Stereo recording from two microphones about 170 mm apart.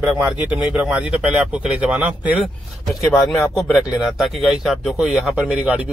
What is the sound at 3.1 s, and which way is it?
Speech, 15° left (ahead or behind).